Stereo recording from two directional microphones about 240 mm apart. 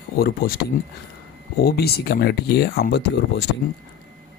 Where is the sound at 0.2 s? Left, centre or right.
Left.